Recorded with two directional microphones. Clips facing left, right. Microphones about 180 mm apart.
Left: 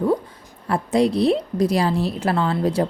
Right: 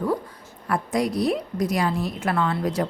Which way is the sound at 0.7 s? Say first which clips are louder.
Left 5 dB; 30° left (ahead or behind).